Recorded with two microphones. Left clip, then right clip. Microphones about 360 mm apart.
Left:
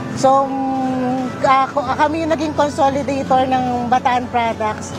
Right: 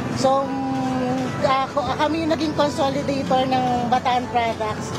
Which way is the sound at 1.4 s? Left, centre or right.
Left.